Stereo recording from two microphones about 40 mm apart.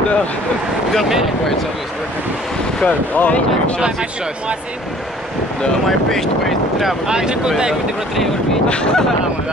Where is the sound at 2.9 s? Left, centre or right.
Left.